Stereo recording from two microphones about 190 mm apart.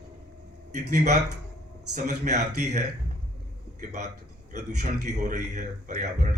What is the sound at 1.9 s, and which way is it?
A man's voice, 40° right (ahead or behind).